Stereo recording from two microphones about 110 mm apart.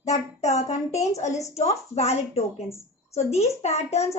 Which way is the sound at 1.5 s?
80° left.